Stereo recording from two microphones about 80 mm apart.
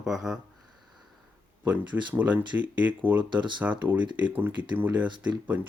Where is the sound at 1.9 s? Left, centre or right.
Centre.